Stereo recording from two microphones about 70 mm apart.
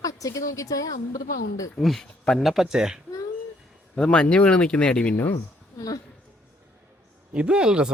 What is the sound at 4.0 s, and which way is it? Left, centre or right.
Speech, centre.